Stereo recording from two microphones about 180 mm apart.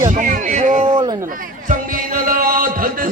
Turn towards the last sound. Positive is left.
turn(degrees=-50)  # may be behind; listen again after turning